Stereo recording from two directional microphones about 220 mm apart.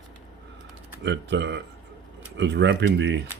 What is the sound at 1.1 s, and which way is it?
Speech, 50° right (ahead or behind).